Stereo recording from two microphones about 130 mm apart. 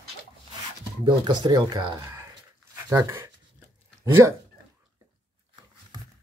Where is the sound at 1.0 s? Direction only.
35° right (ahead or behind).